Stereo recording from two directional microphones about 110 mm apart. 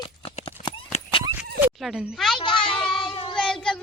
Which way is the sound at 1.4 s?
15° right (ahead or behind).